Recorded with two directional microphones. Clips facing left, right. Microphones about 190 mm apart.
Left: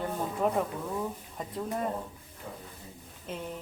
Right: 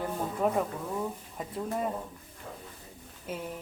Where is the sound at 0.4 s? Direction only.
Centre (ahead or behind).